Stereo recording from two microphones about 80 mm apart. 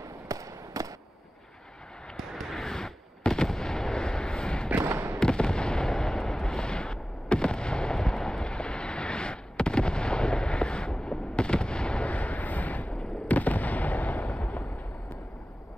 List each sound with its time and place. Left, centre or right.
0.3 s fireworks: right
2.1 s fireworks: centre
4.8 s fireworks: right
5.2 s fireworks: centre